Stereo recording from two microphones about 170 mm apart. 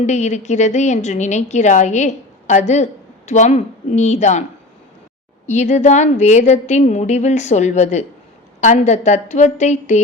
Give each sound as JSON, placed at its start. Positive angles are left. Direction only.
{"t": 0.0, "sound": "a woman's voice", "side_deg": 45}
{"t": 5.5, "sound": "a woman's voice", "side_deg": 45}